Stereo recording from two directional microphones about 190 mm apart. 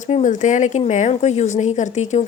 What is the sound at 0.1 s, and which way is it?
Speech, 40° left (ahead or behind).